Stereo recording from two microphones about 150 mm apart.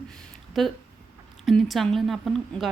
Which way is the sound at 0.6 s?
Centre (ahead or behind).